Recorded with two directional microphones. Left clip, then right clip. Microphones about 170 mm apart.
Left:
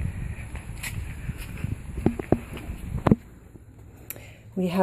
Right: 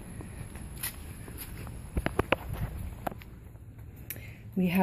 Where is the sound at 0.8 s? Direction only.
Centre (ahead or behind).